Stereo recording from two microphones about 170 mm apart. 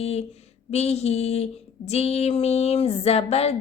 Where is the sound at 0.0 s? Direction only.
40° left (ahead or behind).